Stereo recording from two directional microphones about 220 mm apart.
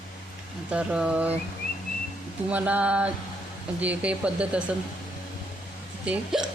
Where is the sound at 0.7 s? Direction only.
5° right (ahead or behind).